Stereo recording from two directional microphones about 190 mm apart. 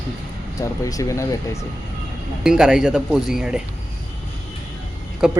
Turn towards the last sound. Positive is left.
turn(degrees=-5)  # may be behind; listen again after turning